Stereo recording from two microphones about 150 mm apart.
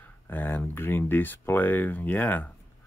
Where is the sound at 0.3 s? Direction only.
10° left (ahead or behind).